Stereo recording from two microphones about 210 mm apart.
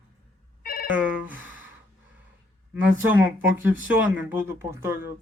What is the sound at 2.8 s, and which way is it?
Speech, 10° right (ahead or behind).